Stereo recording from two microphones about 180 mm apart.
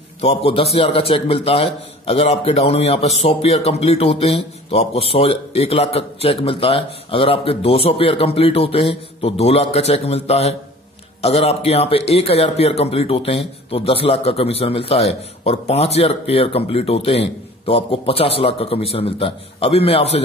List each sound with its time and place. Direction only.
0.2 s a man's voice: 30° left (ahead or behind)